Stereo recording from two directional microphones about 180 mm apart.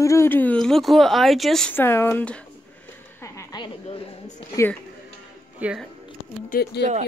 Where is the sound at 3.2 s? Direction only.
20° left (ahead or behind).